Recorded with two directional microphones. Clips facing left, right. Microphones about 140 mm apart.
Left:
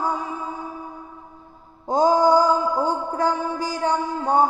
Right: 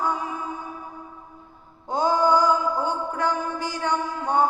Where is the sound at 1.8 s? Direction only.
40° left (ahead or behind).